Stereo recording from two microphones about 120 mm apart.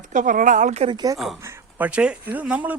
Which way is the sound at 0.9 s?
35° right (ahead or behind).